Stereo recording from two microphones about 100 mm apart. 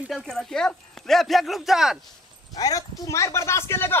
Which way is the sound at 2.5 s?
40° left (ahead or behind).